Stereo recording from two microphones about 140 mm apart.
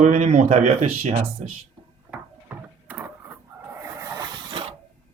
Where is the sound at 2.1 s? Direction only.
10° right (ahead or behind).